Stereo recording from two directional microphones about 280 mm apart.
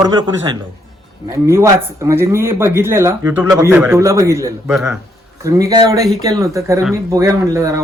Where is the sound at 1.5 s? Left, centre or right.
Centre.